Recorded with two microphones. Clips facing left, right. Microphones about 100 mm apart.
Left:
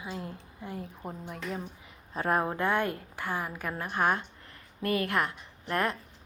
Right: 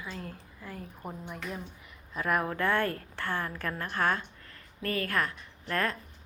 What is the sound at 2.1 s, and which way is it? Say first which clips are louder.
A woman's voice: left 2 dB; 30° left (ahead or behind).